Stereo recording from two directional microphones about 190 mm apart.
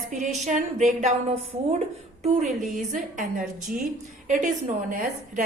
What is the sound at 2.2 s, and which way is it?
Speech, 35° right (ahead or behind).